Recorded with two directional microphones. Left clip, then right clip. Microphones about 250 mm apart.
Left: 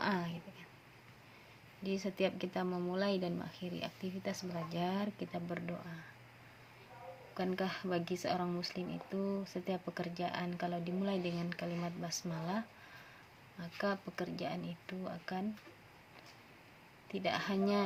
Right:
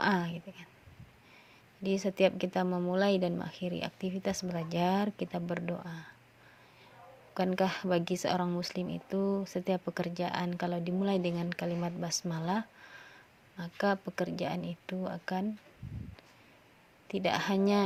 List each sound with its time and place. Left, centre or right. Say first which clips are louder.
0.0 s a sound: right 7 dB; right
1.8 s speech: right 8 dB; right
7.3 s speech: right 7 dB; right
17.1 s speech: right 6 dB; right